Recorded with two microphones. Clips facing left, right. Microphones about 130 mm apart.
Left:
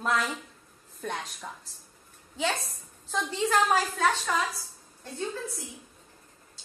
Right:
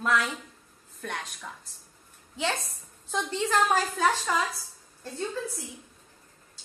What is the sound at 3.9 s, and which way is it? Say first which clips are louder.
Speech: right 1 dB; centre (ahead or behind).